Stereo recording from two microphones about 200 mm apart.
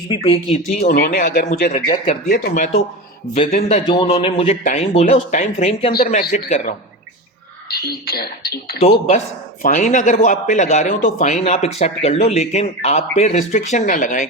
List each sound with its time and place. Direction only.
0.1 s a man's voice: 25° left (ahead or behind)
0.8 s a man's voice: 50° left (ahead or behind)
3.8 s a man's voice: 30° left (ahead or behind)
7.7 s speech: 50° left (ahead or behind)
9.6 s a man's voice: 40° left (ahead or behind)